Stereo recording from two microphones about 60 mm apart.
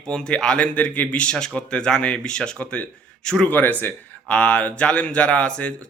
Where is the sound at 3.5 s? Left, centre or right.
Left.